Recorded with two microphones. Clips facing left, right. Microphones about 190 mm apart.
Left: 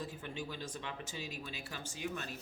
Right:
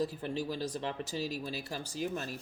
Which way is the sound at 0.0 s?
35° right (ahead or behind).